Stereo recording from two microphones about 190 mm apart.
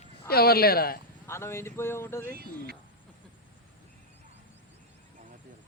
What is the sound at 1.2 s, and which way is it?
Speech, 15° left (ahead or behind).